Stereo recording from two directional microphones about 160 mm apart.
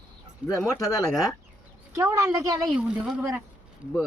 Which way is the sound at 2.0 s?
15° right (ahead or behind).